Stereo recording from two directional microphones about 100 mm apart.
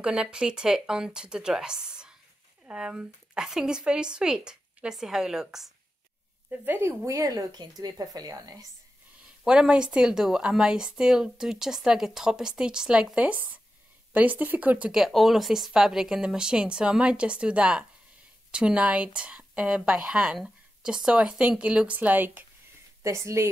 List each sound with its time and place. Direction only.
0.0 s a woman's voice: 10° right (ahead or behind)
6.5 s speech: 20° right (ahead or behind)
7.1 s speech: 35° right (ahead or behind)
9.2 s a woman's voice: 5° right (ahead or behind)
23.0 s speech: 30° right (ahead or behind)